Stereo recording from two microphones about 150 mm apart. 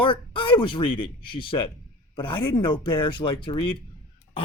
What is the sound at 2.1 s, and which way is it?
Speech, 30° left (ahead or behind).